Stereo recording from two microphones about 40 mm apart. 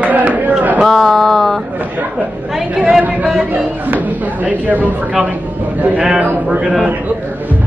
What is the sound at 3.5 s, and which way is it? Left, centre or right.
Chatter, right.